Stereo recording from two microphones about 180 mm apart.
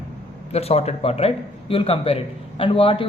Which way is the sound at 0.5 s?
35° left (ahead or behind).